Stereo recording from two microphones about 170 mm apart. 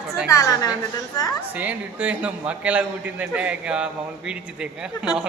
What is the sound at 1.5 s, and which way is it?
A man's voice, 10° right (ahead or behind).